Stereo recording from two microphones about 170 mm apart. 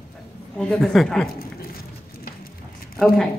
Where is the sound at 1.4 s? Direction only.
60° left (ahead or behind).